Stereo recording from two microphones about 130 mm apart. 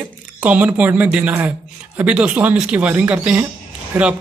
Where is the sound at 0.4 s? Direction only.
10° right (ahead or behind).